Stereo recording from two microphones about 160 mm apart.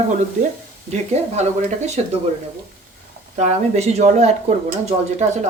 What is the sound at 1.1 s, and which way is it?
Speech, 45° right (ahead or behind).